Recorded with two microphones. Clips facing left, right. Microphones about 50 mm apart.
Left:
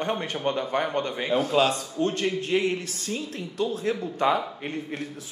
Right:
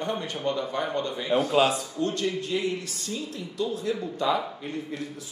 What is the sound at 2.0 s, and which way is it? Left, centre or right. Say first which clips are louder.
Speech: left 3 dB; left.